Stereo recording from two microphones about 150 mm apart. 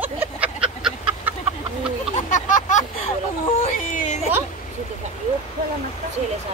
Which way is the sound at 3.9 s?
55° left (ahead or behind).